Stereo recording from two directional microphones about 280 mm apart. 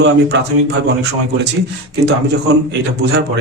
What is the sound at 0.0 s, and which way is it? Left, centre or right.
Speech, right.